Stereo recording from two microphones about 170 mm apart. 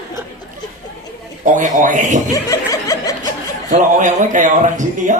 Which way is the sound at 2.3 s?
20° left (ahead or behind).